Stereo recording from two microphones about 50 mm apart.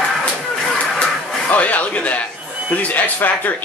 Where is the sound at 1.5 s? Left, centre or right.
Left.